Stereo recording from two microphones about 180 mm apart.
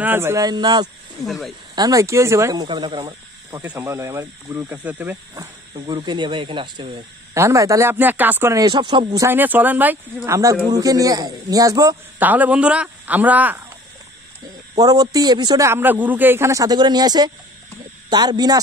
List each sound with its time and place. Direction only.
0.0 s speech: 10° right (ahead or behind)
1.2 s speech: centre (ahead or behind)
1.8 s speech: 20° right (ahead or behind)
7.3 s speech: 15° right (ahead or behind)
14.8 s speech: 20° right (ahead or behind)